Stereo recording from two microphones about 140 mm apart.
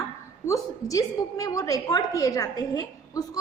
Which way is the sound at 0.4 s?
25° left (ahead or behind).